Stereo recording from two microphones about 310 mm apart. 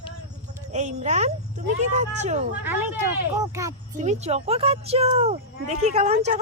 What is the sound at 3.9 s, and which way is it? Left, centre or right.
Speech, right.